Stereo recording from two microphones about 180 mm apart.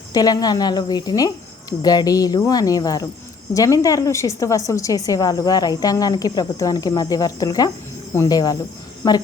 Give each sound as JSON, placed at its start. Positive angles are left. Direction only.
{"t": 0.1, "sound": "a woman's voice", "side_deg": 20}